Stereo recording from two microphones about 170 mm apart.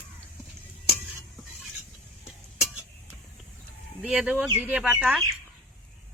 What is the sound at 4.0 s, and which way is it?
Speech, 5° right (ahead or behind).